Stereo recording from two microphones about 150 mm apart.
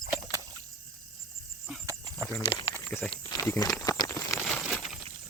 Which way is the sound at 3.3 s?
20° left (ahead or behind).